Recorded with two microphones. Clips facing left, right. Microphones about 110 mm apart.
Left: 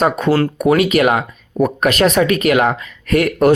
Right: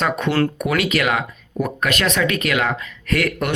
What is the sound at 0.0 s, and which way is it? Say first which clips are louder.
Speech: left 5 dB; 35° left (ahead or behind).